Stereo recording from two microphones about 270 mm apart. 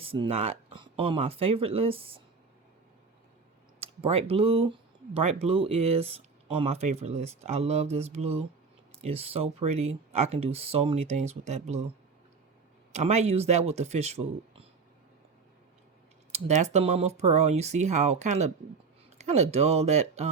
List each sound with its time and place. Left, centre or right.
0.0 s speech: right
3.8 s speech: right
12.9 s speech: right
16.3 s speech: right